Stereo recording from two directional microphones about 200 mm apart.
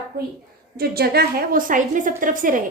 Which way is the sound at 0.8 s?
50° right (ahead or behind).